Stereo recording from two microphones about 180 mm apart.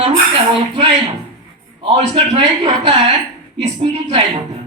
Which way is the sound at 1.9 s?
30° right (ahead or behind).